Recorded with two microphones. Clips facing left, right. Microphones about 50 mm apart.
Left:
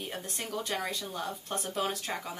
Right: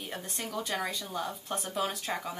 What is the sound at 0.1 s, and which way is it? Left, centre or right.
Speech, centre.